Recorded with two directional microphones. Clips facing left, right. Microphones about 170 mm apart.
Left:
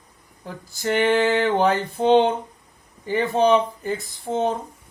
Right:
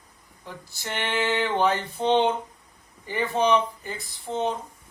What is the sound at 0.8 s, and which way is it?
A man's voice, 45° left (ahead or behind).